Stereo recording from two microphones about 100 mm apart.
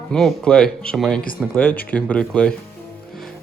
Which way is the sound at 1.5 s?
15° left (ahead or behind).